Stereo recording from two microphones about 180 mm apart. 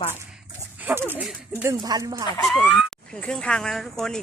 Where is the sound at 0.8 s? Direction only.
10° right (ahead or behind).